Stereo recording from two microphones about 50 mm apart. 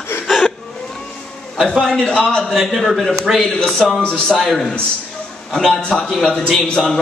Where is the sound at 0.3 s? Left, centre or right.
Centre.